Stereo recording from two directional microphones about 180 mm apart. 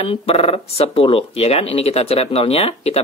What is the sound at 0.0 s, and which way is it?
Speech, 30° left (ahead or behind).